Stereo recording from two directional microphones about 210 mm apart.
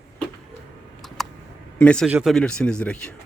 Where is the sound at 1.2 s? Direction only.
Centre (ahead or behind).